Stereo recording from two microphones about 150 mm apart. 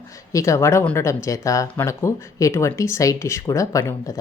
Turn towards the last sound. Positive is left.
turn(degrees=20)  # may be behind; listen again after turning